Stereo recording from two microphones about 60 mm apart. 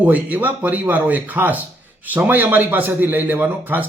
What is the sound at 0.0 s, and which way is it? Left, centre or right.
A man's voice, right.